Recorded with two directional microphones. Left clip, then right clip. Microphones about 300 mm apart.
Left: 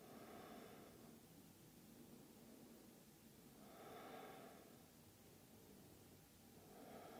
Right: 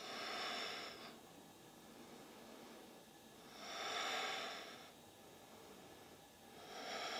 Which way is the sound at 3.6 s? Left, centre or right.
Centre.